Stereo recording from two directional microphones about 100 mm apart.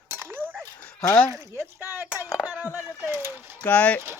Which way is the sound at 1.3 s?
25° right (ahead or behind).